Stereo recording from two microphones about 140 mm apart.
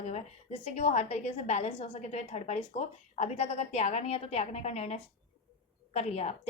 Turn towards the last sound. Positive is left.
turn(degrees=50)  # may be behind; listen again after turning